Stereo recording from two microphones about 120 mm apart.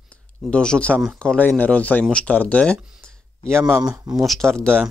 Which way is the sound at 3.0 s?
5° left (ahead or behind).